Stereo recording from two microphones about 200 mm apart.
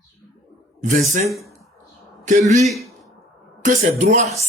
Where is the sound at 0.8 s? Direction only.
40° right (ahead or behind).